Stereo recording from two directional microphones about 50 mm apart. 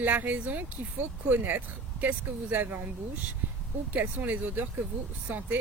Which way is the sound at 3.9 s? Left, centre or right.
Right.